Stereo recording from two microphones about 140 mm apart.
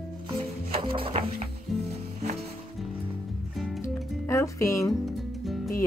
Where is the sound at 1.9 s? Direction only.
50° right (ahead or behind).